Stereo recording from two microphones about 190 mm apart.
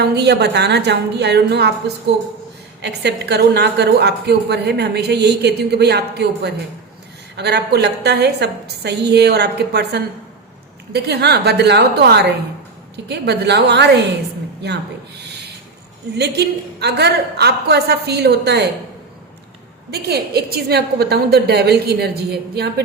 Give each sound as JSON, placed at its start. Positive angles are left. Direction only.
{"t": 0.0, "sound": "a woman's voice", "side_deg": -60}
{"t": 2.8, "sound": "a woman's voice", "side_deg": -60}
{"t": 16.1, "sound": "a woman's voice", "side_deg": -60}
{"t": 19.9, "sound": "a woman's voice", "side_deg": -55}